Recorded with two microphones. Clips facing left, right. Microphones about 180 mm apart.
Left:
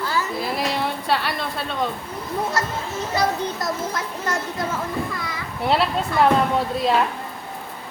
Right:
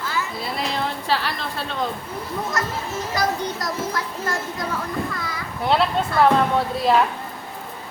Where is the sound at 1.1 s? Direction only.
Centre (ahead or behind).